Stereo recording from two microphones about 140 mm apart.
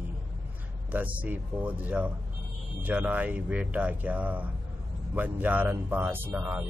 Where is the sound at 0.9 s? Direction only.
10° right (ahead or behind).